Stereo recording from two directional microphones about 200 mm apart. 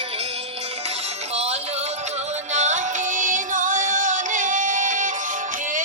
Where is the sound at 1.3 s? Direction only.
30° right (ahead or behind).